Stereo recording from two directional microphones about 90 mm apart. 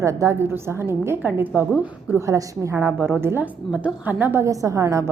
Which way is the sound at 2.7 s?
20° right (ahead or behind).